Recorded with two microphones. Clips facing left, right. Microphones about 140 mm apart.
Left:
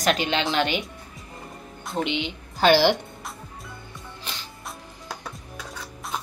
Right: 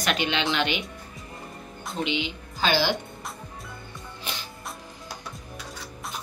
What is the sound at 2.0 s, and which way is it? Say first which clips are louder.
Speech: left 1 dB; 55° left (ahead or behind).